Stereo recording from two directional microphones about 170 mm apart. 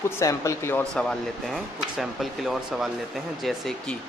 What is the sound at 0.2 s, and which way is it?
Speech, 15° left (ahead or behind).